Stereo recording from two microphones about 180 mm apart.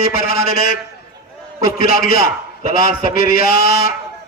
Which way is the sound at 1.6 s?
55° left (ahead or behind).